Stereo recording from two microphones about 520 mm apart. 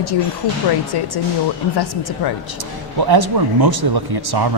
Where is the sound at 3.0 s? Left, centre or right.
Right.